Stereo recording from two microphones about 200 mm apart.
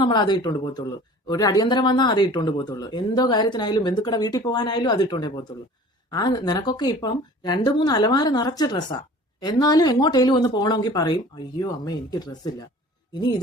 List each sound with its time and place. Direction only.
0.0 s speech: 25° left (ahead or behind)